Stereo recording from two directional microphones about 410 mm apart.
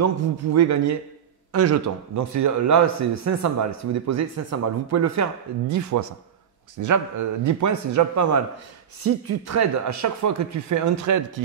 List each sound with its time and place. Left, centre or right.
0.0 s a man's voice: right